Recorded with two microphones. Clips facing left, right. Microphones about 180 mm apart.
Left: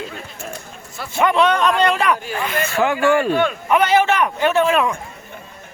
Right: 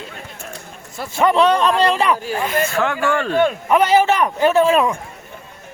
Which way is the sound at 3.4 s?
35° right (ahead or behind).